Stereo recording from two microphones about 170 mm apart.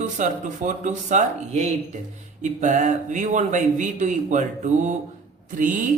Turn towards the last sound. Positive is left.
turn(degrees=-50)  # may be behind; listen again after turning